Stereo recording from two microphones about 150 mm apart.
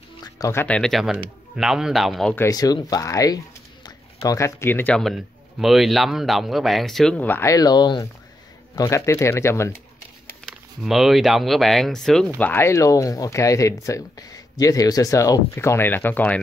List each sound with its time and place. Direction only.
0.4 s a man's voice: 15° left (ahead or behind); by 2.3 s centre (ahead or behind)
2.3 s a man's voice: 20° left (ahead or behind)
10.4 s speech: centre (ahead or behind)
12.4 s speech: 15° left (ahead or behind)